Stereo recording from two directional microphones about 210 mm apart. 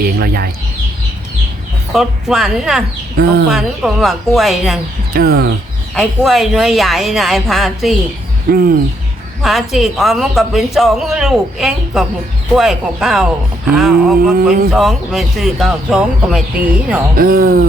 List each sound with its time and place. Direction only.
0.2 s speech: 45° right (ahead or behind)
1.9 s speech: centre (ahead or behind)
3.2 s speech: 45° right (ahead or behind)
3.5 s speech: centre (ahead or behind)
5.1 s speech: 45° right (ahead or behind)
5.9 s speech: centre (ahead or behind)
8.4 s speech: 45° right (ahead or behind)
9.4 s speech: centre (ahead or behind)
17.2 s speech: 45° right (ahead or behind)